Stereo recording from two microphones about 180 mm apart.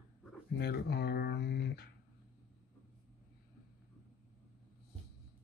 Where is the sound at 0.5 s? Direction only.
60° left (ahead or behind).